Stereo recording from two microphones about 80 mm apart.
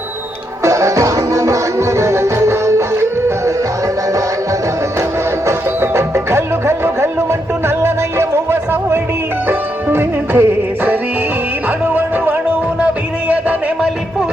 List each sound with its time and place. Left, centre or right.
0.6 s music: right
5.5 s music: right; by 13.6 s centre